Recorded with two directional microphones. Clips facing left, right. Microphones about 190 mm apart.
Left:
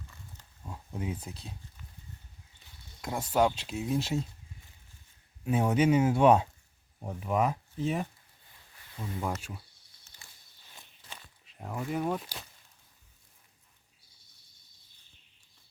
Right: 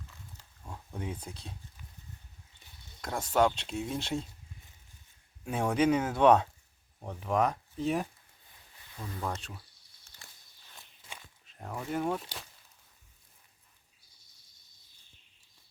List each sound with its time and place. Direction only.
0.6 s speech: 5° left (ahead or behind)
3.0 s speech: 5° left (ahead or behind)
5.5 s speech: 5° left (ahead or behind)
9.1 s speech: 10° left (ahead or behind)
11.4 s speech: centre (ahead or behind)